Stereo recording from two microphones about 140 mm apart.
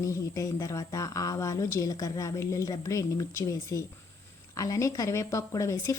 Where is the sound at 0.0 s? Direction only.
20° left (ahead or behind).